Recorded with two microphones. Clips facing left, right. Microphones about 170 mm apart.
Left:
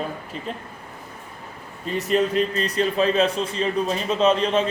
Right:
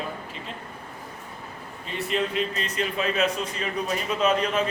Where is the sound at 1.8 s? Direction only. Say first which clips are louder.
Left 6 dB; 40° left (ahead or behind).